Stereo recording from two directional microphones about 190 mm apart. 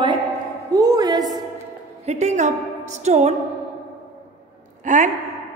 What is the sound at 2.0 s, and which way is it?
A woman's voice, 35° right (ahead or behind).